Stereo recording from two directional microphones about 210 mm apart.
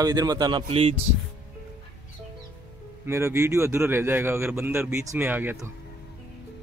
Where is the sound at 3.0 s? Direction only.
10° right (ahead or behind).